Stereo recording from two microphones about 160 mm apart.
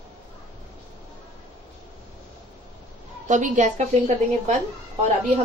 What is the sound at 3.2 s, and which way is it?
Speech, 50° right (ahead or behind).